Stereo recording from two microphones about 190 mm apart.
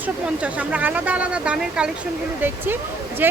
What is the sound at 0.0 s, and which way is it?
Speech, 10° right (ahead or behind).